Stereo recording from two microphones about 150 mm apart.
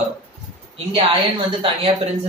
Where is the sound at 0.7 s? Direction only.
40° right (ahead or behind).